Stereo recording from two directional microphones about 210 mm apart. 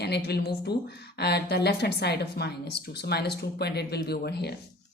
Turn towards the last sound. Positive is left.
turn(degrees=50)  # may be behind; listen again after turning